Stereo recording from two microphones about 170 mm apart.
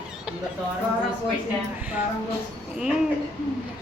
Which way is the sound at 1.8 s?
10° right (ahead or behind).